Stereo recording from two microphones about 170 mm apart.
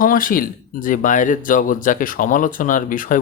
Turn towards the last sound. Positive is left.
turn(degrees=50)  # may be behind; listen again after turning